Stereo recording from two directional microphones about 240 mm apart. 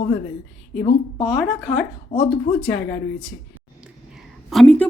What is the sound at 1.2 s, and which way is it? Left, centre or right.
A woman's voice, centre.